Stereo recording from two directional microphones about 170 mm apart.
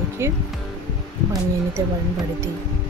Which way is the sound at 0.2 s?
15° right (ahead or behind).